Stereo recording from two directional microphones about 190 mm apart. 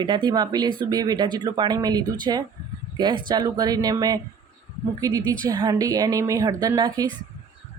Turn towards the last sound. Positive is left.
turn(degrees=-20)  # may be behind; listen again after turning